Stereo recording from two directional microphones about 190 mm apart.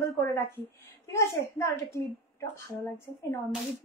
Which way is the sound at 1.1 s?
15° left (ahead or behind).